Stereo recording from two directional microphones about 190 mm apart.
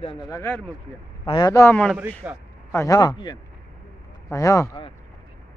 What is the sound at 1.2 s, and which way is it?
Speech, 25° left (ahead or behind).